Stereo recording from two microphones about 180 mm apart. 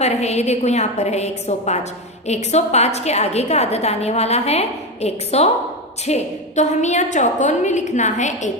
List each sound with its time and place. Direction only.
0.0 s a woman's voice: 35° left (ahead or behind)